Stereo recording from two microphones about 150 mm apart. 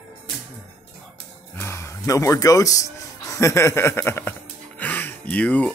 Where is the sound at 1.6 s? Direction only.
15° left (ahead or behind).